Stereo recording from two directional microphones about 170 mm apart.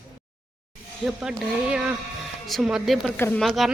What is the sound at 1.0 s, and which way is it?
Speech, centre (ahead or behind).